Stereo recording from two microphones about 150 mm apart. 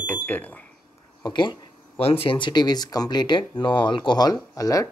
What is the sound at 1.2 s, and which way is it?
Speech, 30° left (ahead or behind).